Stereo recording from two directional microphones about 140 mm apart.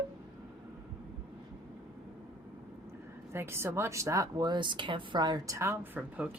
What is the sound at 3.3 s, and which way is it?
Speech, 15° right (ahead or behind).